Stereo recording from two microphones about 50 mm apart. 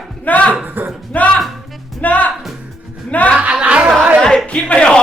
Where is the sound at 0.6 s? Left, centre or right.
Right.